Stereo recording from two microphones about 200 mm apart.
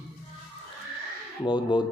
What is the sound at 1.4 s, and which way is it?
Speech, 25° left (ahead or behind).